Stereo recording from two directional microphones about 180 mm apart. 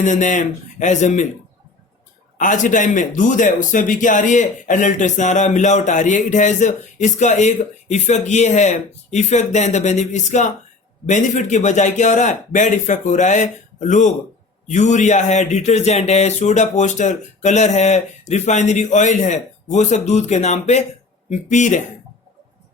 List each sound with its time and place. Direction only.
0.0 s a man's voice: 45° left (ahead or behind)
2.4 s a man's voice: 45° left (ahead or behind)